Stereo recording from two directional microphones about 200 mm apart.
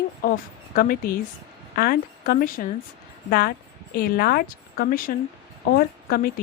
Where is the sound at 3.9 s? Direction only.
50° left (ahead or behind).